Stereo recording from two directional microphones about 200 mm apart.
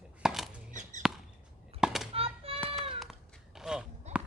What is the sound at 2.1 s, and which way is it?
Music, 30° right (ahead or behind).